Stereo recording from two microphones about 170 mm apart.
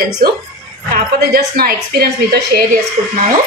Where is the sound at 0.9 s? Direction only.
65° right (ahead or behind).